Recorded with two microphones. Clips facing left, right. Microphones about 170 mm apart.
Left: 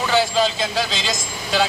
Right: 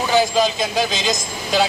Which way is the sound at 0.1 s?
15° right (ahead or behind).